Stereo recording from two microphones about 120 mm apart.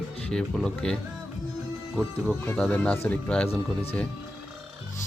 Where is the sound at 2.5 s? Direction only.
10° left (ahead or behind).